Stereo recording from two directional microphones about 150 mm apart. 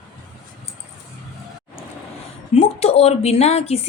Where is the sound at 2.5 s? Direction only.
40° left (ahead or behind).